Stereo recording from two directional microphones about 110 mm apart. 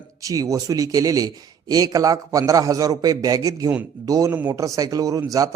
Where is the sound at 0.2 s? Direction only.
30° right (ahead or behind).